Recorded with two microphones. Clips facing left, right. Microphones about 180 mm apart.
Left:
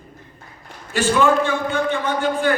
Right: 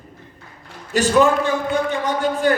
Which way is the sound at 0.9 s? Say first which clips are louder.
Right 2 dB; 40° right (ahead or behind).